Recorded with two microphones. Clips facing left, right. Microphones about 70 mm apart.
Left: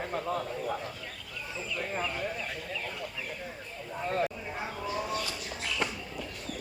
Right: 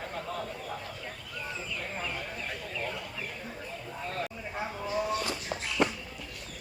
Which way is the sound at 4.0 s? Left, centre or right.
Left.